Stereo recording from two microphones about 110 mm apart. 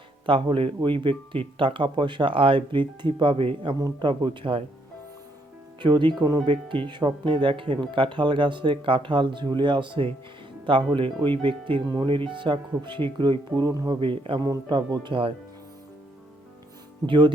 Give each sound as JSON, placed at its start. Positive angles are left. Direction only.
{"t": 0.3, "sound": "speech", "side_deg": -50}
{"t": 5.8, "sound": "speech", "side_deg": -45}
{"t": 14.0, "sound": "speech", "side_deg": -50}
{"t": 14.4, "sound": "speech", "side_deg": -40}
{"t": 15.0, "sound": "speech", "side_deg": -55}
{"t": 17.1, "sound": "speech", "side_deg": -45}